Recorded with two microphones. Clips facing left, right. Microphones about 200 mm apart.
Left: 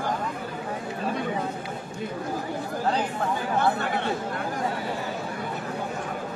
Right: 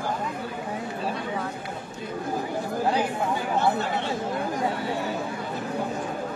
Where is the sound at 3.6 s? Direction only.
55° left (ahead or behind).